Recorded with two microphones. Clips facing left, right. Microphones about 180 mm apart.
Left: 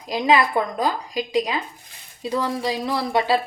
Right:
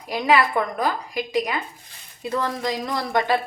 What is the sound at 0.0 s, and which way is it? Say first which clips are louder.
Speech: left 1 dB; 15° left (ahead or behind).